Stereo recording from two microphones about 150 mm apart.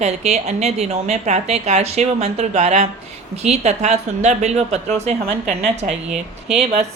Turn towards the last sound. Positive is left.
turn(degrees=-5)  # may be behind; listen again after turning